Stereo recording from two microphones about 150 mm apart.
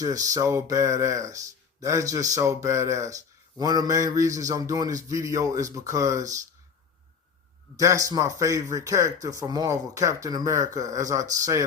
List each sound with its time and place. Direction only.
0.0 s speech: 25° right (ahead or behind)
7.8 s speech: 20° right (ahead or behind)